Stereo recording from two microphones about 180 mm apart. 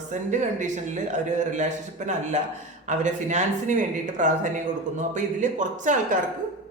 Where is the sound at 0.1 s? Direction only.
40° right (ahead or behind).